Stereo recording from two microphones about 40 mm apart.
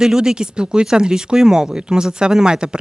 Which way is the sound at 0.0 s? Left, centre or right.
Centre.